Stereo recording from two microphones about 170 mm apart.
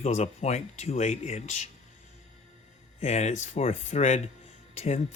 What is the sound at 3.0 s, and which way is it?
Speech, 40° left (ahead or behind).